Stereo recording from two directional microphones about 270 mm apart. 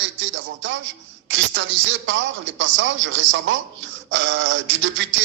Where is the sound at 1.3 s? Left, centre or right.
Right.